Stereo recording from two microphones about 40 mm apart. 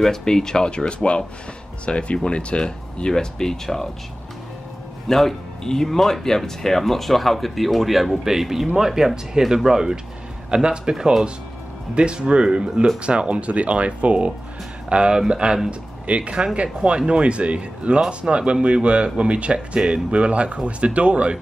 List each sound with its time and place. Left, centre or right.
0.0 s speech: centre
5.0 s speech: centre; by 14.3 s right
14.9 s speech: right